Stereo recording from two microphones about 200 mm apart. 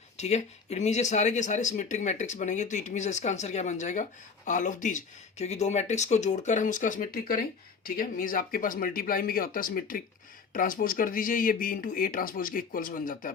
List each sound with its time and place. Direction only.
0.2 s speech: 35° left (ahead or behind)